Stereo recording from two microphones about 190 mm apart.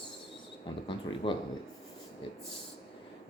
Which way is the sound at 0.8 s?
25° left (ahead or behind).